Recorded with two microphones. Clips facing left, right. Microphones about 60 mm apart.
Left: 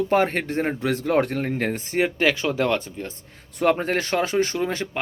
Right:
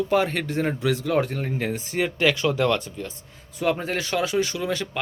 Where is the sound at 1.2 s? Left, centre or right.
Left.